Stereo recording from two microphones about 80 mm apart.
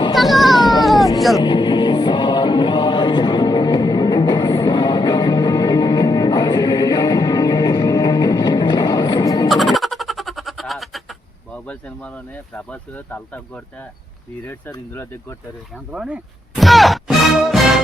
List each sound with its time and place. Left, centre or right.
0.1 s baby cry: centre
0.5 s baby cry: left
1.4 s music: left
9.2 s music: left
9.5 s music: centre
11.5 s a sound: centre
14.9 s speech: left
15.9 s speech: centre
16.6 s music: centre